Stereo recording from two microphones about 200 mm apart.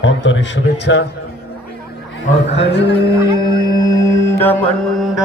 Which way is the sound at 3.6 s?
15° left (ahead or behind).